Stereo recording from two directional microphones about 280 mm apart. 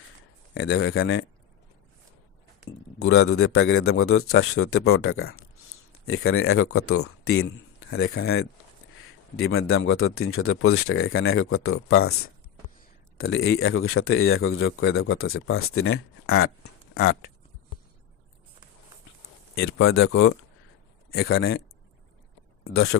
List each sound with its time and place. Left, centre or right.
0.5 s speech: left
3.0 s speech: left
13.1 s speech: left
19.5 s speech: left
22.6 s speech: left